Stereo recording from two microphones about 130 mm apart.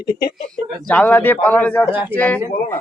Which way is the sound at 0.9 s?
10° left (ahead or behind).